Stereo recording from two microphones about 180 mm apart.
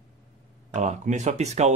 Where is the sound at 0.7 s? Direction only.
40° right (ahead or behind).